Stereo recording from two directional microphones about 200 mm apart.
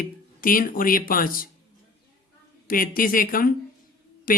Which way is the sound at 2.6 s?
45° left (ahead or behind).